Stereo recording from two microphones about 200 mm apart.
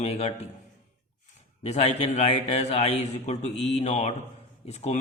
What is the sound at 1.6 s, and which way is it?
A man's voice, 30° left (ahead or behind).